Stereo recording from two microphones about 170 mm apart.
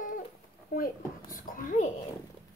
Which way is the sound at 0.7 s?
55° left (ahead or behind).